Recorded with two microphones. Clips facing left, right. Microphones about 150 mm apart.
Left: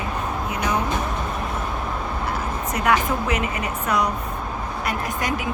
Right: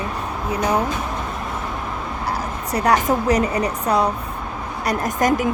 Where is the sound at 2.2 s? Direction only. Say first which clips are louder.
Right 3 dB; 35° right (ahead or behind).